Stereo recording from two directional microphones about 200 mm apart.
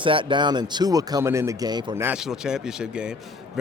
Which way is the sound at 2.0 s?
5° right (ahead or behind).